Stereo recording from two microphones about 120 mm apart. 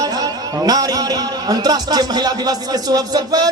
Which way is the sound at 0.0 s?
30° right (ahead or behind).